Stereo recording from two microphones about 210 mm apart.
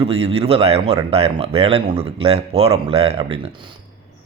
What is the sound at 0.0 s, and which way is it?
Speech, 30° right (ahead or behind).